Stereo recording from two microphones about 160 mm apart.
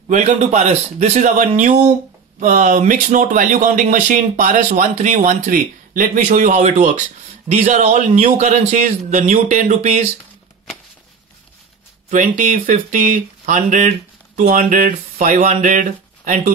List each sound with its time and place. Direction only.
0.1 s speech: 45° right (ahead or behind)
12.1 s speech: 55° right (ahead or behind)